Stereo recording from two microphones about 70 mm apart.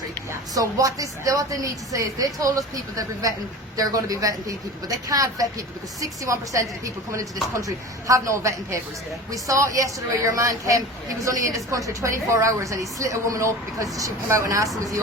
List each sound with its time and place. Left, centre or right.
0.5 s a woman's voice: right